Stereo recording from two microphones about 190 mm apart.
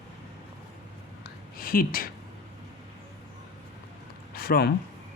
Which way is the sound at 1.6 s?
50° left (ahead or behind).